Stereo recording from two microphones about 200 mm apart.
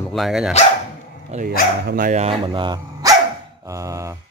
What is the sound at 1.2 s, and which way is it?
Speech, 40° right (ahead or behind).